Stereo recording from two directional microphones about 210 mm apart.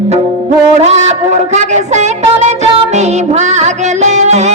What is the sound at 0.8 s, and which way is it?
Music, 35° right (ahead or behind).